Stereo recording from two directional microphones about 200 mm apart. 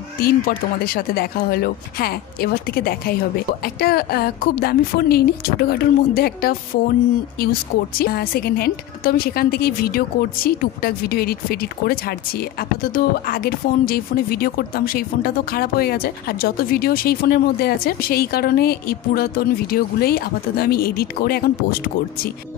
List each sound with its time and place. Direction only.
0.2 s speech: 50° left (ahead or behind)
8.0 s speech: 50° left (ahead or behind)